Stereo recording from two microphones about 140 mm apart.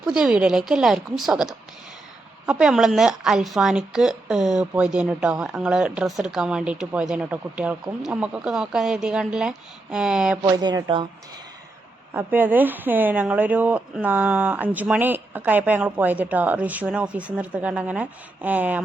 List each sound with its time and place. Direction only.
0.0 s speech: 5° right (ahead or behind)
10.6 s speech: 30° right (ahead or behind)
12.1 s speech: 15° right (ahead or behind)